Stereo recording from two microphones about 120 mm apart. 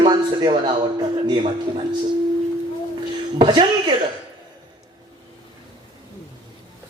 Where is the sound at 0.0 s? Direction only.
40° right (ahead or behind).